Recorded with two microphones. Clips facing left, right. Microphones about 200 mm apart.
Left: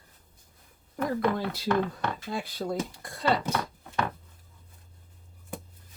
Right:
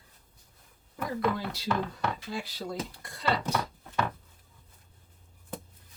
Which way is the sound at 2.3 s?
55° left (ahead or behind).